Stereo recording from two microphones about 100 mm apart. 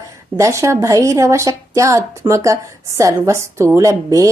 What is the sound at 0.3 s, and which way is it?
A woman's voice, 30° right (ahead or behind).